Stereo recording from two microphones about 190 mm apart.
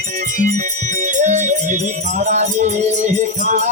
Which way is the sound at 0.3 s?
40° right (ahead or behind).